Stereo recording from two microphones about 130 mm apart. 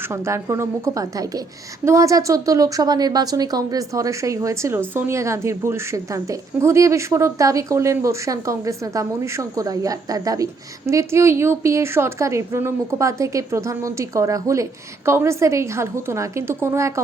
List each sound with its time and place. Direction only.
0.1 s a woman's voice: 20° right (ahead or behind)